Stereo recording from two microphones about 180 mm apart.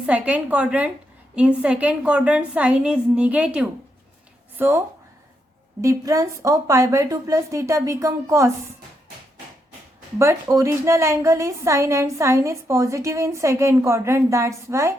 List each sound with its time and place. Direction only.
0.0 s a woman's voice: 10° right (ahead or behind)
5.8 s a woman's voice: 20° right (ahead or behind)
10.2 s a woman's voice: 15° right (ahead or behind)